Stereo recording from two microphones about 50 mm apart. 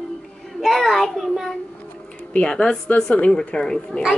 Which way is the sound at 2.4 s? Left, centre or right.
Centre.